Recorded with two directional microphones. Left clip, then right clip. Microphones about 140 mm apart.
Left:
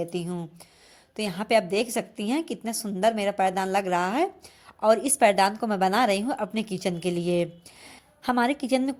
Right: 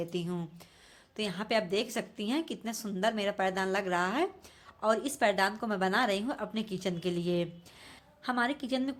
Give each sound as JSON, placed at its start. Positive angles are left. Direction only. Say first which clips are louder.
{"t": 0.0, "sound": "speech", "louder": "left 5 dB", "side_deg": 25}
{"t": 1.1, "sound": "a woman's voice", "louder": "left 8 dB", "side_deg": 35}